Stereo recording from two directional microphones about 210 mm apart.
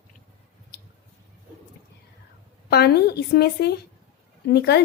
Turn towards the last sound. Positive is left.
turn(degrees=50)  # may be behind; listen again after turning